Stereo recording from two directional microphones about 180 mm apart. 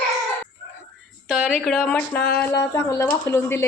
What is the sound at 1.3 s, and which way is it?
Speech, 5° right (ahead or behind).